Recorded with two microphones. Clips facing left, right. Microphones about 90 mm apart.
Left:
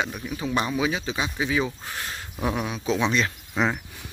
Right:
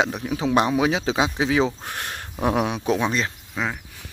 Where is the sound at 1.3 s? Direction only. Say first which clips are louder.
Right 5 dB; 80° right; by 3.1 s 55° right (ahead or behind).